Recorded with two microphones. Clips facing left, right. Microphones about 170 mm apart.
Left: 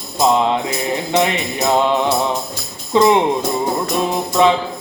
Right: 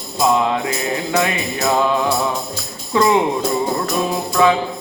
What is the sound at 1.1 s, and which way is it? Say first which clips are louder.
Music: left 3 dB; 25° left (ahead or behind).